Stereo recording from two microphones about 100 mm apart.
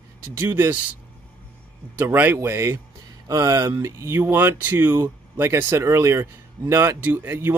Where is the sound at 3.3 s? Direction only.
35° right (ahead or behind).